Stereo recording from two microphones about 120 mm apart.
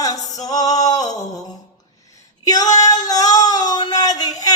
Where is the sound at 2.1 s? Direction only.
30° left (ahead or behind).